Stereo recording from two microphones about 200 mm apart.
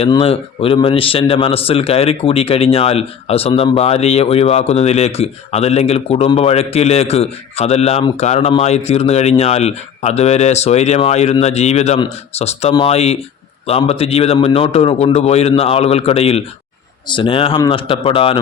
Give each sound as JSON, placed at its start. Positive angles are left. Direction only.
{"t": 0.0, "sound": "a man's voice", "side_deg": 30}